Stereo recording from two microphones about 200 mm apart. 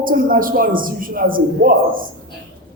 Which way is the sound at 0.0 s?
45° right (ahead or behind).